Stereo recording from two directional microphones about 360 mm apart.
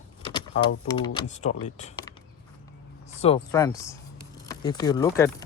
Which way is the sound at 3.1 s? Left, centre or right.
Centre.